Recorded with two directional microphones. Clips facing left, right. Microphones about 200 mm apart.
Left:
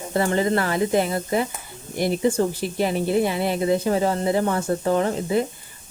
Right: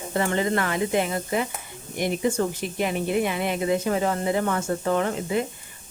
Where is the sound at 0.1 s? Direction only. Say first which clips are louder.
Left 3 dB; 35° left (ahead or behind).